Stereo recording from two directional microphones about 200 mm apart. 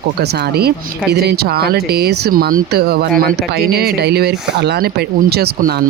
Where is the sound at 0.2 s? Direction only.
55° right (ahead or behind).